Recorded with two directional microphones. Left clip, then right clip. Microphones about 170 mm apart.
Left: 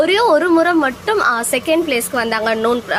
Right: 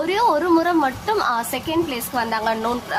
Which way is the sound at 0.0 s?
15° left (ahead or behind).